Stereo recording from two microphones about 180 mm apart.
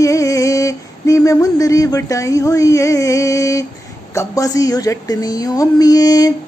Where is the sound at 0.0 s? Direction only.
20° left (ahead or behind).